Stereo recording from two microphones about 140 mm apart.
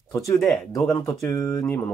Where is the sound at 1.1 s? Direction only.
20° left (ahead or behind).